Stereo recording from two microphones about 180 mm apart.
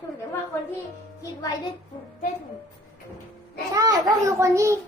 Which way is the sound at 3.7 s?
20° right (ahead or behind).